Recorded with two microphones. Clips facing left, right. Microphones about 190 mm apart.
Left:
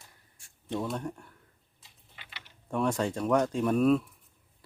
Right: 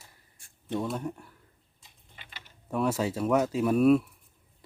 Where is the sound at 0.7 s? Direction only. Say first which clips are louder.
Right 2 dB; 5° right (ahead or behind).